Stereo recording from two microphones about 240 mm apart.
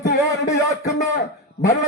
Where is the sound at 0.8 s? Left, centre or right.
Left.